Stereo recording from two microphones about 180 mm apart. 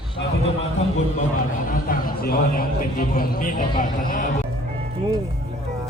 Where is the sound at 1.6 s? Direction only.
50° left (ahead or behind).